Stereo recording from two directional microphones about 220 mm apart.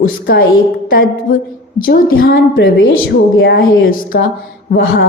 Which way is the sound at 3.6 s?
40° left (ahead or behind).